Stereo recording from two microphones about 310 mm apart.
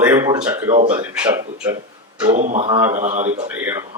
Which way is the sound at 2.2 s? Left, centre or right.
Right.